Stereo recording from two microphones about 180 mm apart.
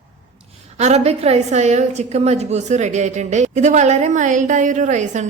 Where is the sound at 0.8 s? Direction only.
40° right (ahead or behind).